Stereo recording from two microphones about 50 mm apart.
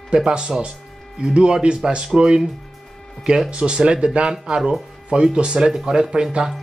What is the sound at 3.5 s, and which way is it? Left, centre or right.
Speech, right.